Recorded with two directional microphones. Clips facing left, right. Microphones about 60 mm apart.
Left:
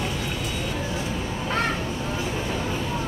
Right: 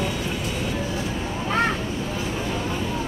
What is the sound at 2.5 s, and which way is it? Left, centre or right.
Vehicle, centre.